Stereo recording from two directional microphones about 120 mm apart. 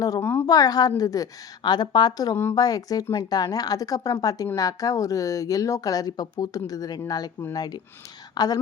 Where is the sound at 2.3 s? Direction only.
20° left (ahead or behind).